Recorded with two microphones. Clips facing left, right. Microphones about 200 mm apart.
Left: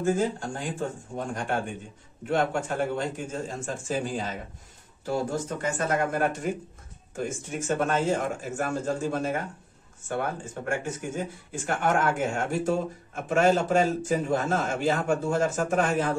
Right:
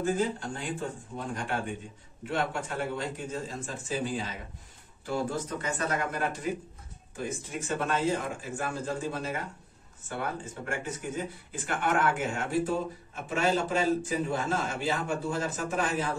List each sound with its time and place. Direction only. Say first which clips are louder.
0.2 s speech: left 3 dB; 45° left (ahead or behind)